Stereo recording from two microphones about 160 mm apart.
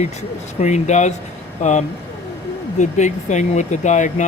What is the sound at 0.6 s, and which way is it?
Speech, 45° left (ahead or behind).